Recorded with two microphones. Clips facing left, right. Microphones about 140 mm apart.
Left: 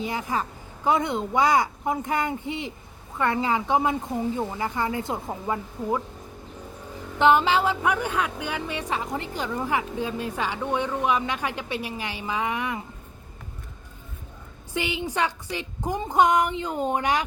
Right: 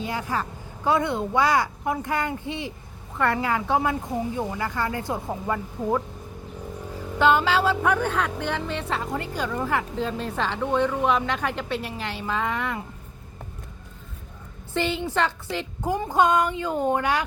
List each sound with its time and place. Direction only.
0.1 s speech: 20° left (ahead or behind)
7.2 s speech: 20° left (ahead or behind)
14.7 s speech: 15° left (ahead or behind)